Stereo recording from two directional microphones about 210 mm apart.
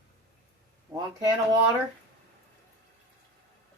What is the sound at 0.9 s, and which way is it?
Speech, 20° right (ahead or behind).